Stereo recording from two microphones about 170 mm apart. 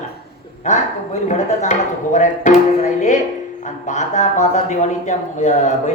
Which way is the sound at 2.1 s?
45° left (ahead or behind).